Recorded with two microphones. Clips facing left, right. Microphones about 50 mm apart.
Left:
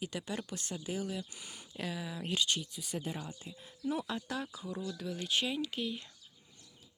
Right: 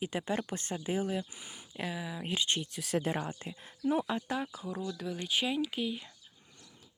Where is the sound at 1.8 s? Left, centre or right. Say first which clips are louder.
Right 2 dB; centre.